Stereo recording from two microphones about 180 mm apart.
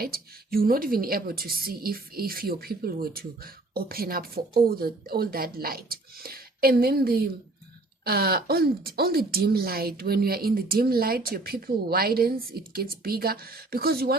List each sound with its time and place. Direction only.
0.0 s a woman's voice: 55° right (ahead or behind)